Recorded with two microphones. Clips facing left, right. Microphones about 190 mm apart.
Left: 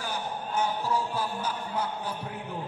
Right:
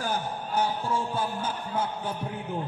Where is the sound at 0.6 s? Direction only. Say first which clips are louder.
Right 1 dB; 25° right (ahead or behind).